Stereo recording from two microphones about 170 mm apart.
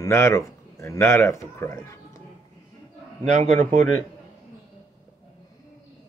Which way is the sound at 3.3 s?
45° right (ahead or behind).